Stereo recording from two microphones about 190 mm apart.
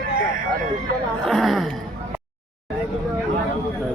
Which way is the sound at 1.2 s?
Centre (ahead or behind).